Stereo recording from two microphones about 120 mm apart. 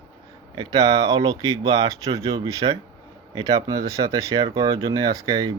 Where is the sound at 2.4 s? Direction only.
30° right (ahead or behind).